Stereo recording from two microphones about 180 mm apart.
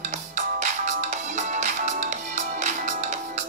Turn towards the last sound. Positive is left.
turn(degrees=-40)  # may be behind; listen again after turning